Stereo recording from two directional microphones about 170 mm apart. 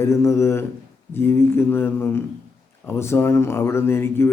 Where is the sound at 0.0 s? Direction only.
15° left (ahead or behind).